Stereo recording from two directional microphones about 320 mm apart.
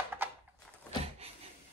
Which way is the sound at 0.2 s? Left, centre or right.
Centre.